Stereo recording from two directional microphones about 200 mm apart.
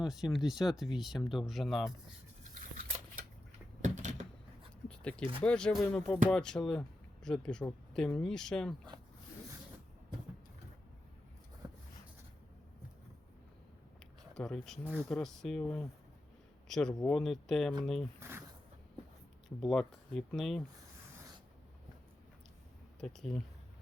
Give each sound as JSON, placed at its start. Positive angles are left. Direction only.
{"t": 0.0, "sound": "speech", "side_deg": 0}
{"t": 3.8, "sound": "a sound", "side_deg": -35}
{"t": 4.9, "sound": "a sound", "side_deg": 5}
{"t": 5.4, "sound": "speech", "side_deg": 5}
{"t": 11.6, "sound": "a sound", "side_deg": -15}
{"t": 14.3, "sound": "a man's voice", "side_deg": 0}
{"t": 18.2, "sound": "zipper", "side_deg": -10}
{"t": 19.5, "sound": "speech", "side_deg": 0}
{"t": 23.0, "sound": "speech", "side_deg": 0}